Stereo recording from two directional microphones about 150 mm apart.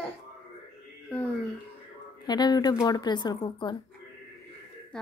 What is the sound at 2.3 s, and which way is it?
Speech, 25° left (ahead or behind).